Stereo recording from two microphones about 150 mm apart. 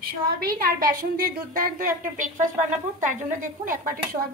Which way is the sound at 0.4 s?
80° right.